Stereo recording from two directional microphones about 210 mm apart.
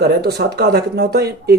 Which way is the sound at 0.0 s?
50° right (ahead or behind).